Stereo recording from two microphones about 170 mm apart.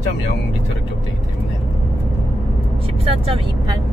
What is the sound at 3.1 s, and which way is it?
Speech, 30° right (ahead or behind).